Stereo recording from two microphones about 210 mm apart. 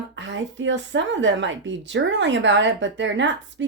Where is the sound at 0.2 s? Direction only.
60° right (ahead or behind).